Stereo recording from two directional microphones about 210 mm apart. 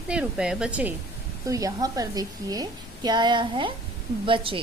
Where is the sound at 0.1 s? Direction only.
5° right (ahead or behind).